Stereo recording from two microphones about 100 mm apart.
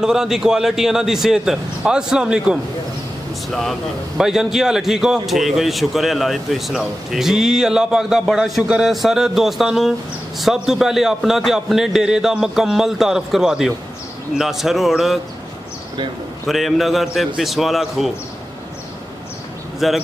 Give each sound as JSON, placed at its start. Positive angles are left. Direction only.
{"t": 0.0, "sound": "a man's voice", "side_deg": -5}
{"t": 4.2, "sound": "a man's voice", "side_deg": -5}
{"t": 16.4, "sound": "a man's voice", "side_deg": 0}
{"t": 19.8, "sound": "a man's voice", "side_deg": 0}